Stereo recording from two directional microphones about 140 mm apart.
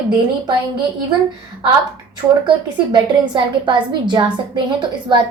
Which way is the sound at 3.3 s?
35° right (ahead or behind).